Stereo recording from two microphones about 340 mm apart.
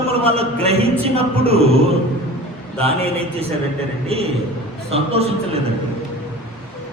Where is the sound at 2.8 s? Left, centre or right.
Centre.